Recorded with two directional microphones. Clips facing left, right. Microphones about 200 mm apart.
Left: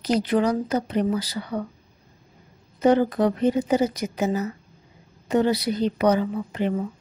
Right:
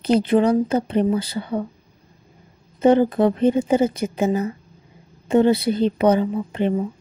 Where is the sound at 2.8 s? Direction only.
25° right (ahead or behind).